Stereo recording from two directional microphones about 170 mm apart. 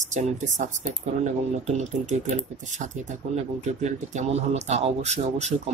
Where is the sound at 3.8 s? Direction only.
40° right (ahead or behind).